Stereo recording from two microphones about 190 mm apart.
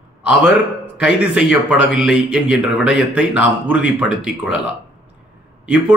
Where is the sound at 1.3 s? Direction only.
5° right (ahead or behind).